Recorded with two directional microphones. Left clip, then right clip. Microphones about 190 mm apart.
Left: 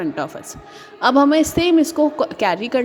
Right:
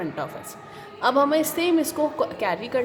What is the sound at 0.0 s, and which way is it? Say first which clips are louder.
A woman's voice: left 6 dB; 30° left (ahead or behind).